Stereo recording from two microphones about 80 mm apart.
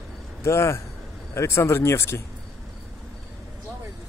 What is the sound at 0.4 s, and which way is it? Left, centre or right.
Speech, left.